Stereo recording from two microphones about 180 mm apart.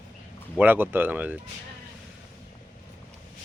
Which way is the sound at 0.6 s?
10° right (ahead or behind).